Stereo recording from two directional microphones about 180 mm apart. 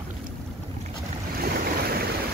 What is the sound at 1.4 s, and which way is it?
Waves, 55° right (ahead or behind).